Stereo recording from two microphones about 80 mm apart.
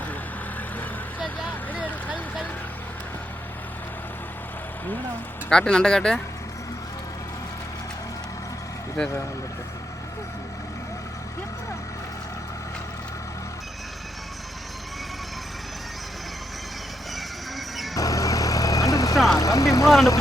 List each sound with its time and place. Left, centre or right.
1.5 s vehicle: centre
5.5 s speech: centre
17.9 s vehicle: left
19.1 s speech: centre
19.4 s speech: left